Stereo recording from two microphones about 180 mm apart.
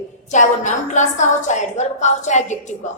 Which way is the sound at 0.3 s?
40° left (ahead or behind).